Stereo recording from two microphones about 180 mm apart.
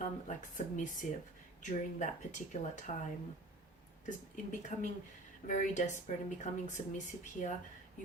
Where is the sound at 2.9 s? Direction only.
40° left (ahead or behind).